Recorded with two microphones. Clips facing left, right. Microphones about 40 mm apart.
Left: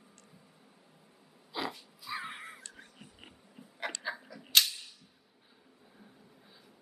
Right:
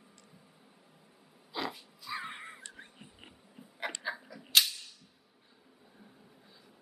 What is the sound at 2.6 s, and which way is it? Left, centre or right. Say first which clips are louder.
Insect: right 2 dB; right.